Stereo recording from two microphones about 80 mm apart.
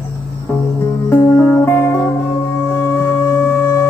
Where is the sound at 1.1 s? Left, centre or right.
Left.